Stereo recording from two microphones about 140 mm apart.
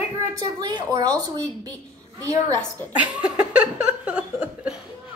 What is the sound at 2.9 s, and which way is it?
Speech, 10° right (ahead or behind).